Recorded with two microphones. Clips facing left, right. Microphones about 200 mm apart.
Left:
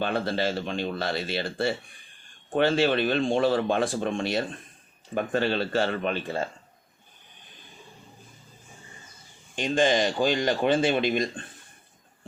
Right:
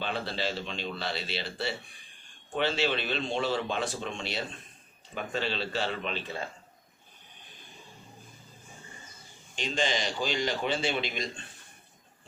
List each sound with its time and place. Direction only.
0.0 s speech: 50° left (ahead or behind)
9.6 s speech: 50° left (ahead or behind)